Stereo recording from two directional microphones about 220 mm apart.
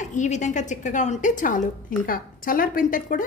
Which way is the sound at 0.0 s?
35° left (ahead or behind).